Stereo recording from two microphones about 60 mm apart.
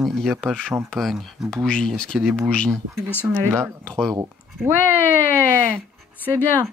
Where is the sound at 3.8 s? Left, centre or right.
Centre.